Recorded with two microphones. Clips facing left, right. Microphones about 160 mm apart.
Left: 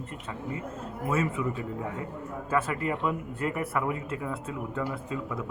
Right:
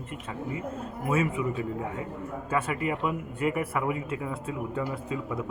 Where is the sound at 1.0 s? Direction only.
10° right (ahead or behind).